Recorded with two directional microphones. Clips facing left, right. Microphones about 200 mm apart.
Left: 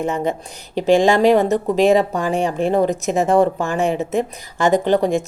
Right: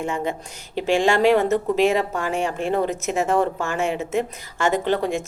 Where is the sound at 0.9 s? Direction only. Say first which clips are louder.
Left 3 dB; 15° left (ahead or behind).